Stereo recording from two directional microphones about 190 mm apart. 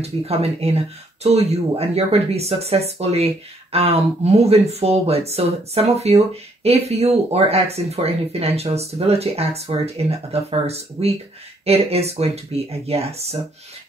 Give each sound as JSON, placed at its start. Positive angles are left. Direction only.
{"t": 0.0, "sound": "speech", "side_deg": -30}